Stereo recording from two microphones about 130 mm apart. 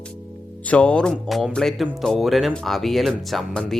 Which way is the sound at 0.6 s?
10° left (ahead or behind).